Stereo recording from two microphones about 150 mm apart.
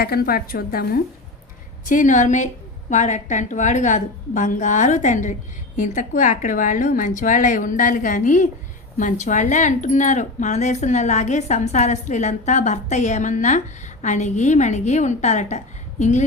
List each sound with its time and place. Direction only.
0.0 s a woman's voice: 85° left
1.8 s a woman's voice: 60° left (ahead or behind)